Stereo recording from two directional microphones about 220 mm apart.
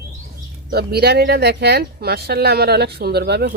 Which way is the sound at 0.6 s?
45° right (ahead or behind).